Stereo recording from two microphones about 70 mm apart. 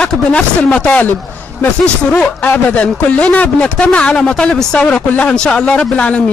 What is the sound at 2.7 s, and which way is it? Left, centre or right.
Speech, centre.